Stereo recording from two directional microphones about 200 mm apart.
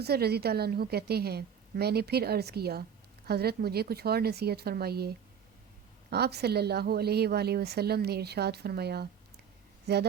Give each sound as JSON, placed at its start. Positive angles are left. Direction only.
{"t": 0.0, "sound": "a woman's voice", "side_deg": -55}